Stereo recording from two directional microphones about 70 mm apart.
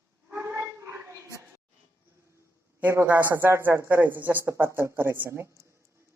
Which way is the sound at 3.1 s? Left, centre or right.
Right.